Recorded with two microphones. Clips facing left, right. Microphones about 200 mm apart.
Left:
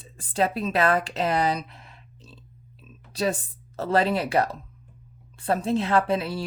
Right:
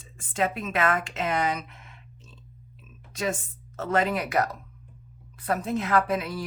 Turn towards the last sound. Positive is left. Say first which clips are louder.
# left 2 dB
turn(degrees=30)  # may be behind; listen again after turning